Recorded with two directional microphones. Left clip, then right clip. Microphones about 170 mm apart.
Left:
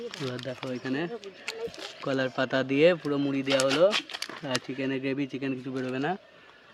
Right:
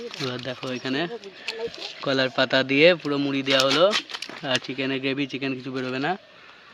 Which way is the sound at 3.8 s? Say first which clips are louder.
Right 3 dB; 30° right (ahead or behind).